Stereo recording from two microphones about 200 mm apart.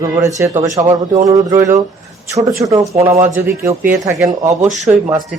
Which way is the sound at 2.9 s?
30° right (ahead or behind).